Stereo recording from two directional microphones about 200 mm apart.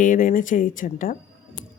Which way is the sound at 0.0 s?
40° left (ahead or behind).